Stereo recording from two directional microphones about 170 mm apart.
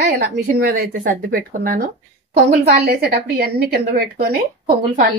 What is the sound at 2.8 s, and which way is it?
A woman's voice, 65° right (ahead or behind).